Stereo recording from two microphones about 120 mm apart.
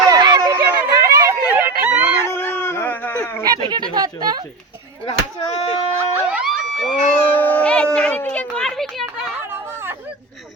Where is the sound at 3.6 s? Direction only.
35° right (ahead or behind).